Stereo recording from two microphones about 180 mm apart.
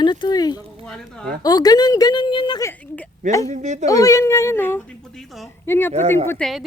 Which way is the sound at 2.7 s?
10° left (ahead or behind).